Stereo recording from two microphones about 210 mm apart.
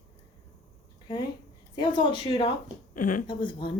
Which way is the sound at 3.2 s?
25° left (ahead or behind).